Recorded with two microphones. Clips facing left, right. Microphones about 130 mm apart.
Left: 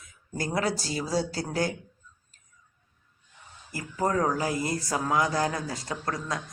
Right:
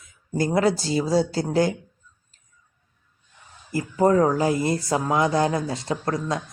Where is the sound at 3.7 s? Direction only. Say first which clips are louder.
Right 8 dB; 25° right (ahead or behind).